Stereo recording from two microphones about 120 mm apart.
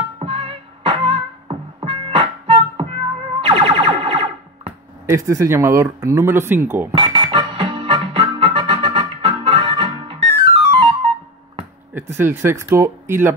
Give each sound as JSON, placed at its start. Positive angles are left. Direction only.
{"t": 0.2, "sound": "music", "side_deg": -50}
{"t": 5.0, "sound": "speech", "side_deg": -25}
{"t": 6.9, "sound": "music", "side_deg": -45}
{"t": 11.9, "sound": "speech", "side_deg": -20}